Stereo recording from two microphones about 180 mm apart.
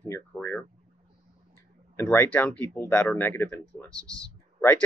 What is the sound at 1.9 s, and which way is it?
Speech, 10° left (ahead or behind).